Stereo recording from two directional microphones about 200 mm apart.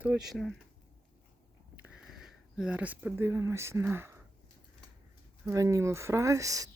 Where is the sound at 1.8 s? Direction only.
5° right (ahead or behind).